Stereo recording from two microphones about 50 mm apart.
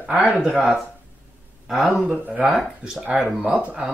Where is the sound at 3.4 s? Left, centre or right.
Right.